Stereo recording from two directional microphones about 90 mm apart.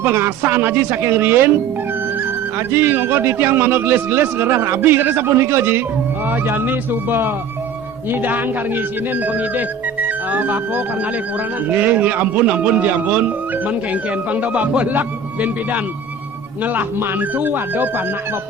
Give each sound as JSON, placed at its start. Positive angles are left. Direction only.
{"t": 0.0, "sound": "a man's voice", "side_deg": -25}
{"t": 2.6, "sound": "a man's voice", "side_deg": -25}